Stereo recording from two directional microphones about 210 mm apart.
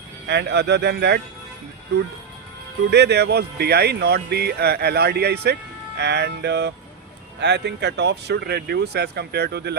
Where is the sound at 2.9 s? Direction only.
55° right (ahead or behind).